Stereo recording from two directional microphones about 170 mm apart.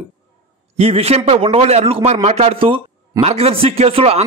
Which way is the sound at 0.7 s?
35° right (ahead or behind).